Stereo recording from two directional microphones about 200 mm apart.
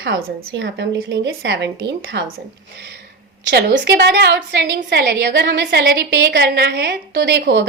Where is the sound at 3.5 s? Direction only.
60° right (ahead or behind).